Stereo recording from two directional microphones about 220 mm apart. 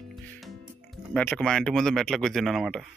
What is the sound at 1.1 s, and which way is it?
Speech, 5° left (ahead or behind).